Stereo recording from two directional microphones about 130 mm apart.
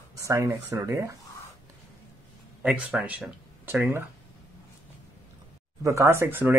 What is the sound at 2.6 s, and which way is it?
Speech, 10° right (ahead or behind).